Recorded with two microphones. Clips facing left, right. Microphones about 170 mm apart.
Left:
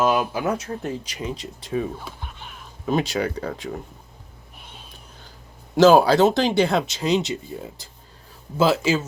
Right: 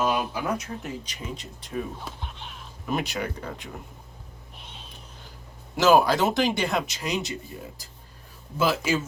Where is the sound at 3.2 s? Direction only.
90° left.